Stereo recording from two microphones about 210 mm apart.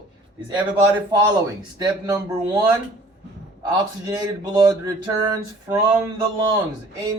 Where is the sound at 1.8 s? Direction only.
15° right (ahead or behind).